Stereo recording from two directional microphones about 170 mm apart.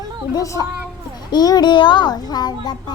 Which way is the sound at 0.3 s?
20° left (ahead or behind).